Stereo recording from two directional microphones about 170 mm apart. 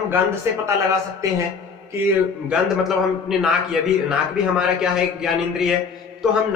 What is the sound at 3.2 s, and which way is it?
A man's voice, 5° right (ahead or behind).